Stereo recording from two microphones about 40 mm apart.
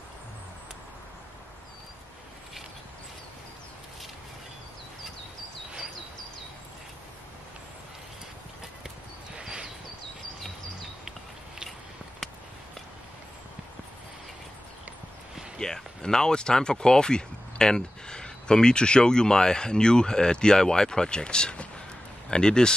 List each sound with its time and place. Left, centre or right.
9.4 s horse: right
15.6 s speech: centre